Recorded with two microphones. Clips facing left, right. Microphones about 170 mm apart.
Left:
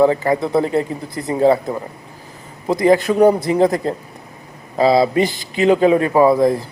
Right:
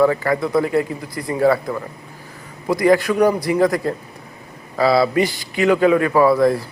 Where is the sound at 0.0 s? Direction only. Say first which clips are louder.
Left 2 dB; 20° left (ahead or behind).